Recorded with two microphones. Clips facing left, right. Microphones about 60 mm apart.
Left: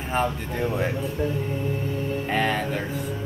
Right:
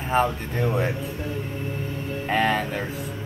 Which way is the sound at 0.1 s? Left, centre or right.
Centre.